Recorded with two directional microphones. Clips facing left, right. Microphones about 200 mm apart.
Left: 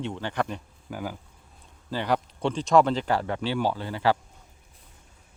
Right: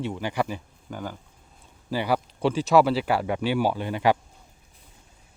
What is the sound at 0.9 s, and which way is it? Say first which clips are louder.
Speech: left 1 dB; 5° left (ahead or behind).